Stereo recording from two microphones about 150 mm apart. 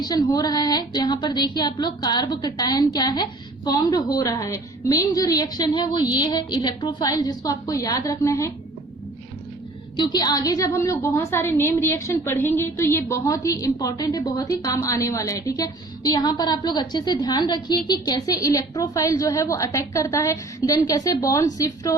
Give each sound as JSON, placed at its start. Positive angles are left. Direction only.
{"t": 0.0, "sound": "a woman's voice", "side_deg": 25}
{"t": 10.0, "sound": "a woman's voice", "side_deg": 25}